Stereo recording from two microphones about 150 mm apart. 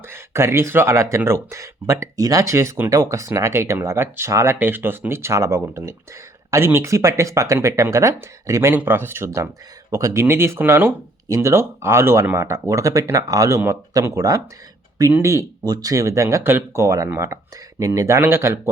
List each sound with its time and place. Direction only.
0.1 s speech: 15° right (ahead or behind)